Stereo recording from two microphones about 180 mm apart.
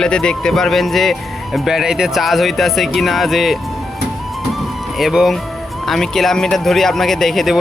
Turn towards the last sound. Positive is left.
turn(degrees=0)  # may be behind; listen again after turning